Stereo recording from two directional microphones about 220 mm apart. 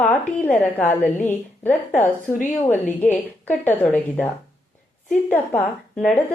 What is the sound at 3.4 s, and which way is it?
A woman's voice, 5° left (ahead or behind).